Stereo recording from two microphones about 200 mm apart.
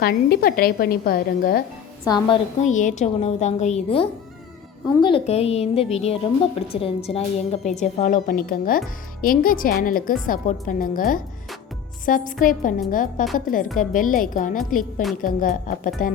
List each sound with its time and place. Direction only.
0.0 s a woman's voice: 50° left (ahead or behind)
2.0 s a woman's voice: 20° left (ahead or behind)
2.6 s a woman's voice: 40° left (ahead or behind)